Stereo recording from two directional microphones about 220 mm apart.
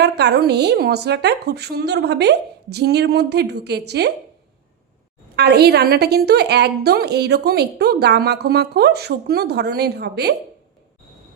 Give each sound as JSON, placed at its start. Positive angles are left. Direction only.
{"t": 0.0, "sound": "a woman's voice", "side_deg": -50}
{"t": 5.4, "sound": "a woman's voice", "side_deg": -45}